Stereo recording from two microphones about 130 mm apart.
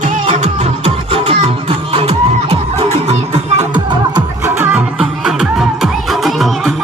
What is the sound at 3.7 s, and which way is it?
Music, 35° right (ahead or behind).